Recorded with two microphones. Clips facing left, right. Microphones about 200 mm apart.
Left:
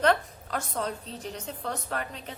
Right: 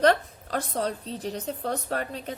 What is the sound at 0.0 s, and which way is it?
A woman's voice, 35° right (ahead or behind).